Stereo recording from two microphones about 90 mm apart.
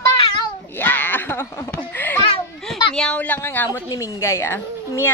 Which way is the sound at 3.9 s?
45° left (ahead or behind).